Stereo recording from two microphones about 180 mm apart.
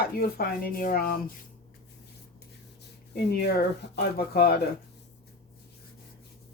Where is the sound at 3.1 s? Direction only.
65° left (ahead or behind).